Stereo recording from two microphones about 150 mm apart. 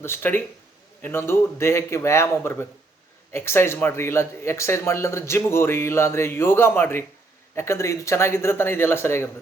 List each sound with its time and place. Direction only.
0.0 s speech: 15° left (ahead or behind)